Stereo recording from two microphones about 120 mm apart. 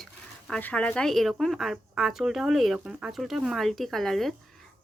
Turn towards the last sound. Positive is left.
turn(degrees=0)  # may be behind; listen again after turning